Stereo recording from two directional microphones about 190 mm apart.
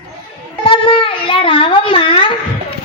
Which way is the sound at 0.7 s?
30° left (ahead or behind).